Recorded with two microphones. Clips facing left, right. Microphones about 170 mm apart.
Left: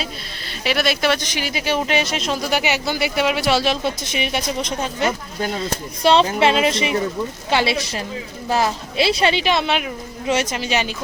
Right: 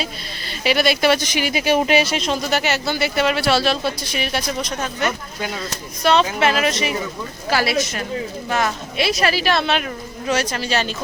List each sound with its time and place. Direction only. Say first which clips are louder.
0.0 s a woman's voice: right 1 dB; centre (ahead or behind); by 10.9 s 15° left (ahead or behind)